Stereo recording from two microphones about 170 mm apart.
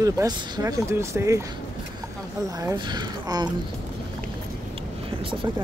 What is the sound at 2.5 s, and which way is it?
Speech, 20° right (ahead or behind).